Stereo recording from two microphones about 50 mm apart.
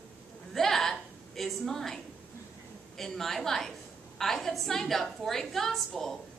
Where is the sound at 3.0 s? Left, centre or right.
Centre.